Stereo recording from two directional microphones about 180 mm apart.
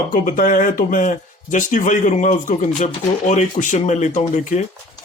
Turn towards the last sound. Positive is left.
turn(degrees=40)  # may be behind; listen again after turning